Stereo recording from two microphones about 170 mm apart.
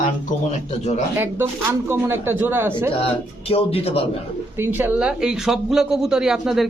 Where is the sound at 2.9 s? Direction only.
35° left (ahead or behind).